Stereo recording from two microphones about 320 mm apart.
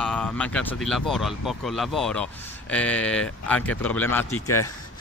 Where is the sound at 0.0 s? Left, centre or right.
Centre.